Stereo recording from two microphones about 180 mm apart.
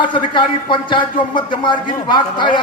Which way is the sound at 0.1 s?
25° left (ahead or behind).